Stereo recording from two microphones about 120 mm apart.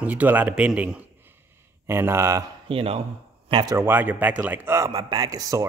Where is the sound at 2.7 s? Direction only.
50° right (ahead or behind).